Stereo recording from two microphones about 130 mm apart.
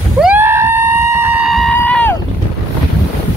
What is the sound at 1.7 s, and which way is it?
Boat, 15° left (ahead or behind).